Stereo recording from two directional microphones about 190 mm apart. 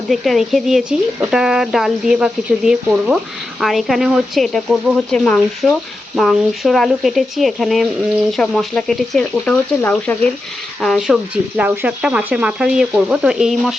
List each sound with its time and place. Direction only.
0.1 s speech: centre (ahead or behind)